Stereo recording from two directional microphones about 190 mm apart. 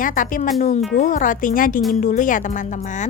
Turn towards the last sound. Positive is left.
turn(degrees=40)  # may be behind; listen again after turning